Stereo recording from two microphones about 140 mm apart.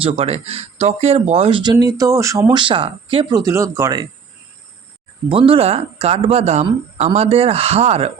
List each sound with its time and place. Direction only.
0.0 s speech: 45° right (ahead or behind)
3.3 s speech: 20° right (ahead or behind)
5.3 s speech: 40° right (ahead or behind)